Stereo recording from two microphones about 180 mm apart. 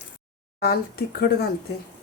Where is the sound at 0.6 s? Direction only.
60° left (ahead or behind).